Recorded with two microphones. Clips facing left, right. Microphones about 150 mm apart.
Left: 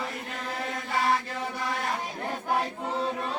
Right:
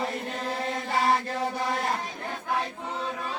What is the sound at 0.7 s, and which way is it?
Chant, 35° right (ahead or behind).